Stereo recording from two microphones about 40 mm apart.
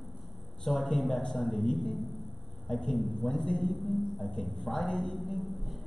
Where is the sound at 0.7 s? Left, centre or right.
Centre.